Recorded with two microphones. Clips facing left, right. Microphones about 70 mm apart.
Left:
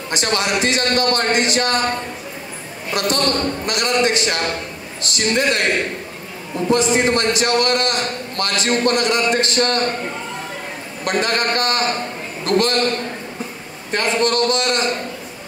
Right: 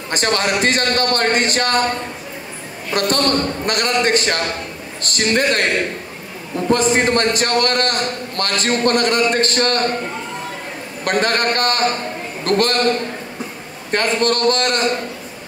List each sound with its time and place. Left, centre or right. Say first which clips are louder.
0.1 s a man's voice: right 2 dB; right
2.9 s a woman's voice: right 2 dB; right
6.7 s a man's voice: right 1 dB; right
11.1 s a man's voice: right 2 dB; right
13.9 s a man's voice: even; right